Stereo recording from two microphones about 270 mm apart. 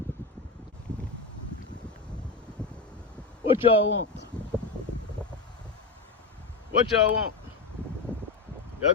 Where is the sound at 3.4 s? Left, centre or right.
Centre.